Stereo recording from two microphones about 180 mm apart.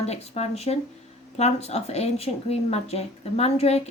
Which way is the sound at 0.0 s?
35° left (ahead or behind).